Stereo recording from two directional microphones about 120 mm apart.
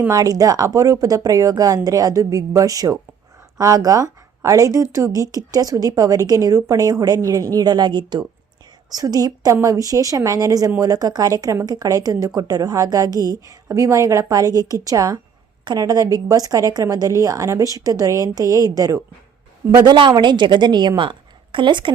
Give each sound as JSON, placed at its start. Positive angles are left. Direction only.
{"t": 0.1, "sound": "a woman's voice", "side_deg": -30}
{"t": 19.7, "sound": "speech", "side_deg": -40}